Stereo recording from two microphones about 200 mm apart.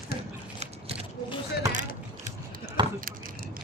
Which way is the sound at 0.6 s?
30° right (ahead or behind).